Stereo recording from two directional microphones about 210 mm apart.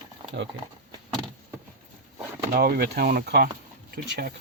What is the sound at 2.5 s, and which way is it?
Speech, 45° right (ahead or behind).